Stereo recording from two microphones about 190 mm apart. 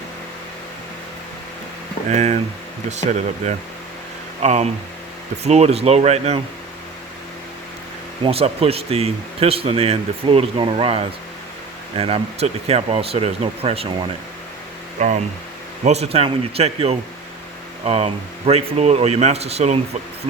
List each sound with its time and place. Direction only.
2.0 s speech: 35° right (ahead or behind)
8.2 s speech: 30° right (ahead or behind)
14.9 s speech: 40° right (ahead or behind)